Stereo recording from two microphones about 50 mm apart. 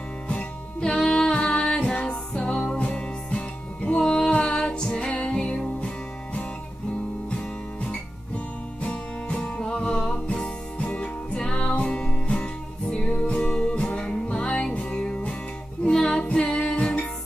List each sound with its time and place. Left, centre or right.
0.3 s music: left
8.8 s music: left